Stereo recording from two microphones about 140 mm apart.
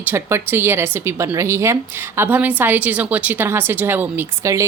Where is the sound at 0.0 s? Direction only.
15° right (ahead or behind).